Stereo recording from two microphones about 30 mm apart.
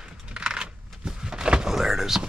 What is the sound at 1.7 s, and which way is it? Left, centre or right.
Power windows, centre.